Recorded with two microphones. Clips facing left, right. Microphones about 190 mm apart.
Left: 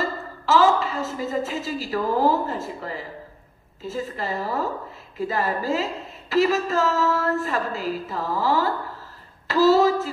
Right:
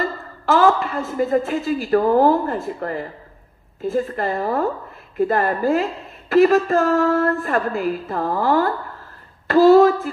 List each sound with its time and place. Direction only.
0.0 s a woman's voice: 55° right (ahead or behind)